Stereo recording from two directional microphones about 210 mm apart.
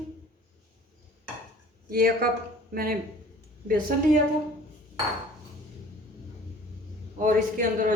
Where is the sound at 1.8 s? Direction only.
45° right (ahead or behind).